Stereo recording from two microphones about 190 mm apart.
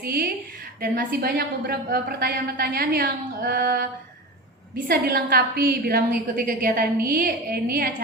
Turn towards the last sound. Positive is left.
turn(degrees=-50)  # may be behind; listen again after turning